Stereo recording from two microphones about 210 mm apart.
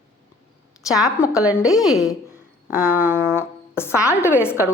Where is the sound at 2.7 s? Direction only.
5° right (ahead or behind).